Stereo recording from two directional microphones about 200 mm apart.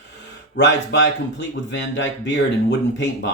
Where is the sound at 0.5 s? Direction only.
60° left (ahead or behind).